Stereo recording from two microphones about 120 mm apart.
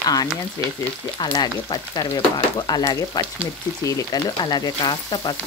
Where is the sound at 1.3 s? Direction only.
35° left (ahead or behind).